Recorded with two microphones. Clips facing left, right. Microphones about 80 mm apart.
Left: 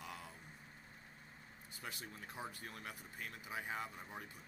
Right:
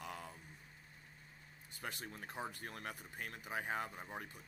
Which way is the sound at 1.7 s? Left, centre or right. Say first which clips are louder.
Right 3 dB; right.